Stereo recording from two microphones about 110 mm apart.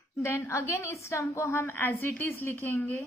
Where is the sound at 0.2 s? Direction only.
25° left (ahead or behind).